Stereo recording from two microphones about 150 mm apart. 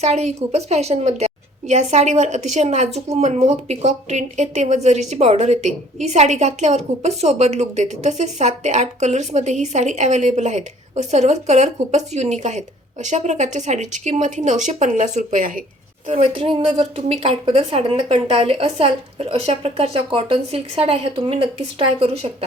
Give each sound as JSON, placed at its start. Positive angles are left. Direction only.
{"t": 0.0, "sound": "speech", "side_deg": -45}
{"t": 16.0, "sound": "a woman's voice", "side_deg": -35}